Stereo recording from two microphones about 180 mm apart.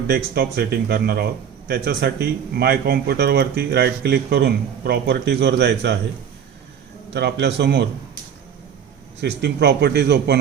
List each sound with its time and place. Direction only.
0.1 s speech: 65° right (ahead or behind)
7.1 s speech: 70° right (ahead or behind)
9.2 s speech: 65° right (ahead or behind)